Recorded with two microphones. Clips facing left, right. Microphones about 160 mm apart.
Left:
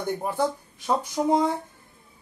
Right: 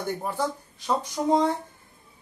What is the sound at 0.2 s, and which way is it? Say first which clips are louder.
A man's voice: left 3 dB; 10° left (ahead or behind).